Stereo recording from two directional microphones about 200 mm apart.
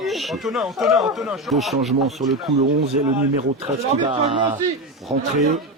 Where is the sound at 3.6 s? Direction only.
25° right (ahead or behind).